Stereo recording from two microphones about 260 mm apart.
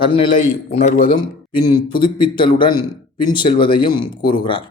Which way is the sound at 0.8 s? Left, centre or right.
Left.